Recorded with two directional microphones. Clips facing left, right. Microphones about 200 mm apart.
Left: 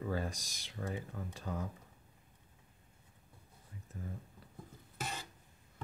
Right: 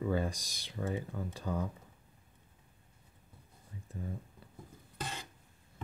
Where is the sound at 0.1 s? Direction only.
30° right (ahead or behind).